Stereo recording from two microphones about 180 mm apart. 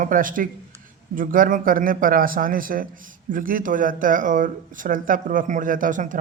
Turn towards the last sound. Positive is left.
turn(degrees=-45)  # may be behind; listen again after turning